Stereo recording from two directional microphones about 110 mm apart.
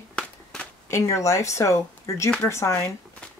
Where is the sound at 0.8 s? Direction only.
25° left (ahead or behind).